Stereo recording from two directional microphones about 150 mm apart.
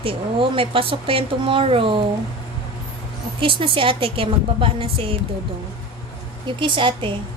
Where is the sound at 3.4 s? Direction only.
35° right (ahead or behind).